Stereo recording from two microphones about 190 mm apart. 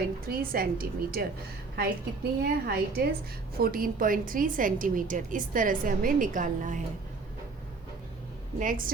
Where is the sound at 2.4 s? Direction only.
55° right (ahead or behind).